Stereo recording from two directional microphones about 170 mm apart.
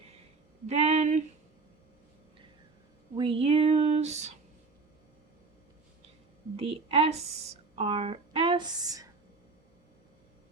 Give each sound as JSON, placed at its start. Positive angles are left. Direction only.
{"t": 0.7, "sound": "speech", "side_deg": -40}
{"t": 3.2, "sound": "speech", "side_deg": -35}
{"t": 6.6, "sound": "speech", "side_deg": -35}